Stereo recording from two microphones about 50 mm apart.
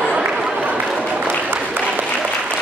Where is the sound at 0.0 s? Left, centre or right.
Right.